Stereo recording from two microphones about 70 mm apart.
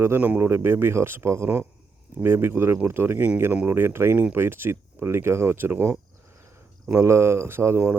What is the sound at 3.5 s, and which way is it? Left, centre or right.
Speech, right.